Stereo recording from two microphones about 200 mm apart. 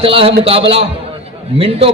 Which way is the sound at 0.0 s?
30° right (ahead or behind).